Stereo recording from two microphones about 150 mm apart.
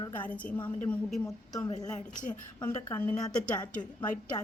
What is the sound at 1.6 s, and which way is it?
A woman's voice, 25° left (ahead or behind).